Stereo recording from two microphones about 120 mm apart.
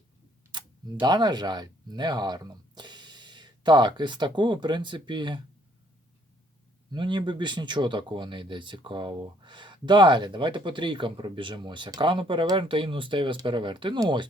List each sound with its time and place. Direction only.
0.5 s speech: 35° right (ahead or behind)
6.9 s speech: 40° right (ahead or behind)